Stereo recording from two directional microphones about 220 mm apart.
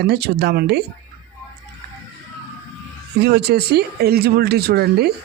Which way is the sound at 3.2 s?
50° right (ahead or behind).